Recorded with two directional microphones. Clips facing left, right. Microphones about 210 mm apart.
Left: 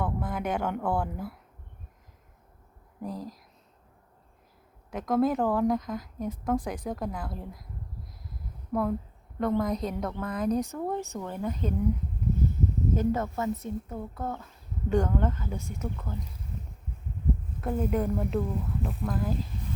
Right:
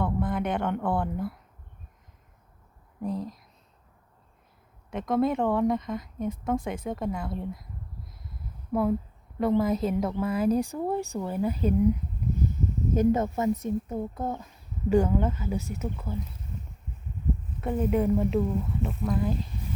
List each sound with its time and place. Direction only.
0.0 s speech: centre (ahead or behind)
3.0 s speech: centre (ahead or behind)
4.9 s speech: centre (ahead or behind)
8.3 s a sound: 5° right (ahead or behind)
9.4 s speech: 5° right (ahead or behind)
12.9 s speech: 20° right (ahead or behind)
17.6 s speech: centre (ahead or behind)